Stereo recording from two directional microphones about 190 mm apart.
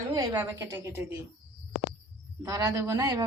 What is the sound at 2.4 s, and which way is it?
Speech, 20° right (ahead or behind).